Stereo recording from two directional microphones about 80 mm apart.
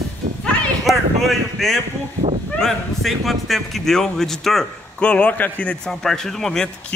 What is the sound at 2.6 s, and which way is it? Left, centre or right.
A man's voice, centre.